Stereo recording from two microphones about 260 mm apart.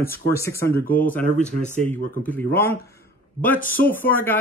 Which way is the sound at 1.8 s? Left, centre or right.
Centre.